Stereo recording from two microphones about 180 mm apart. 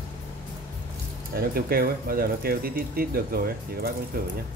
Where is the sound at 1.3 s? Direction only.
55° right (ahead or behind).